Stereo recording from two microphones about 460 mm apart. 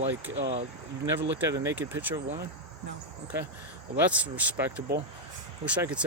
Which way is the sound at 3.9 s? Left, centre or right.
Centre.